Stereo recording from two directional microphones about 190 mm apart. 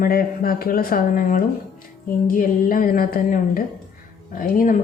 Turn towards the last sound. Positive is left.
turn(degrees=45)  # may be behind; listen again after turning